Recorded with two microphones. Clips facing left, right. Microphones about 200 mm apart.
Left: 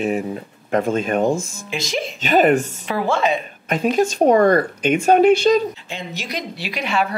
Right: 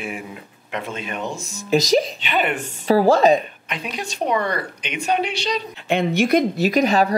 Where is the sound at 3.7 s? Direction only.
45° left (ahead or behind).